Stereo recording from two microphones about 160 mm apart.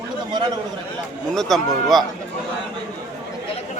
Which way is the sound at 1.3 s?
Centre (ahead or behind).